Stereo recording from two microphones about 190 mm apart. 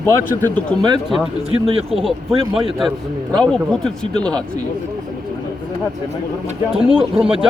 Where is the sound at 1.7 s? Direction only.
30° right (ahead or behind).